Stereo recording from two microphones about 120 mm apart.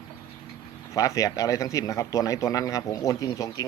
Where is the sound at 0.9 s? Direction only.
25° left (ahead or behind).